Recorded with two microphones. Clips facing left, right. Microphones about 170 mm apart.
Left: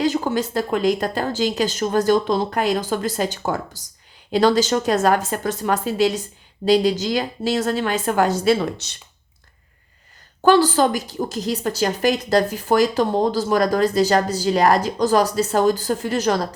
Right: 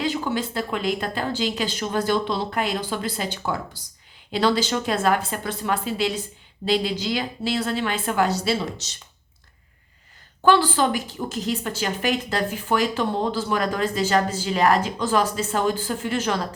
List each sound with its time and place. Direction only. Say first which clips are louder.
0.0 s a woman's voice: left 5 dB; 45° left (ahead or behind); by 9.0 s 60° left (ahead or behind)
10.4 s a woman's voice: left 4 dB; 40° left (ahead or behind)